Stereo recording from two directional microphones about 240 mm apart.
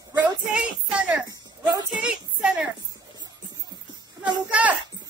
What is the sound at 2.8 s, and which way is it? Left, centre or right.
Music, centre.